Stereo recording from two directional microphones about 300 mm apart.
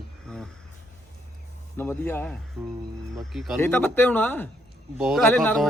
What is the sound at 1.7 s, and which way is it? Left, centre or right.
A man's voice, centre.